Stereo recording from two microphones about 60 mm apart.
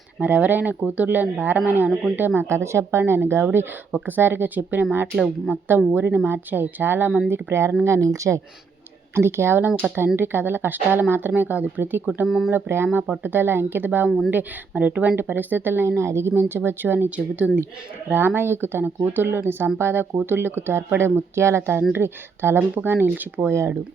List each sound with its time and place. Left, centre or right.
0.2 s speech: right
7.9 s speech: right
9.1 s speech: right
18.1 s speech: right
23.5 s speech: right